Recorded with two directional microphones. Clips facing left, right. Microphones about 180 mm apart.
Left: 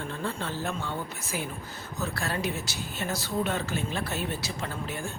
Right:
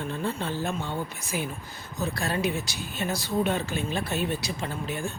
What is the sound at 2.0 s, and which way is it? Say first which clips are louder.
Speech: right 3 dB; 15° right (ahead or behind).